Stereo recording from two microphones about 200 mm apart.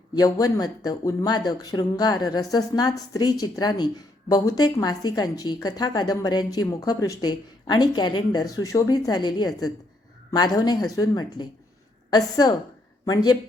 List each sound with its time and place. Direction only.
0.1 s speech: 20° left (ahead or behind)